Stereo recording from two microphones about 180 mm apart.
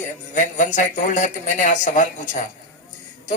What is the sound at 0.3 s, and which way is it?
Speech, 45° left (ahead or behind).